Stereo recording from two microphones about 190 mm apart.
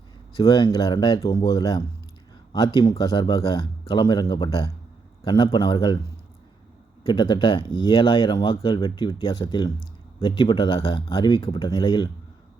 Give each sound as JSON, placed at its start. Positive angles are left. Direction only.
{"t": 0.3, "sound": "speech", "side_deg": 25}
{"t": 7.0, "sound": "speech", "side_deg": 25}